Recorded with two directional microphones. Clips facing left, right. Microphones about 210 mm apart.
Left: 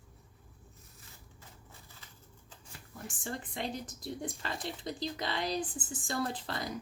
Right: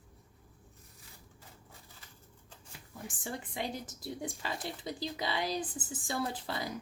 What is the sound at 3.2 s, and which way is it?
Speech, 10° right (ahead or behind).